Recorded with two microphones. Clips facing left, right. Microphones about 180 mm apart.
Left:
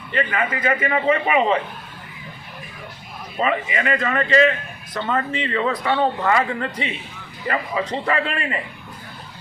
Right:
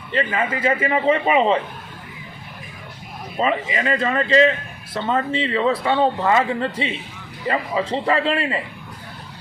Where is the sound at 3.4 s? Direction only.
30° right (ahead or behind).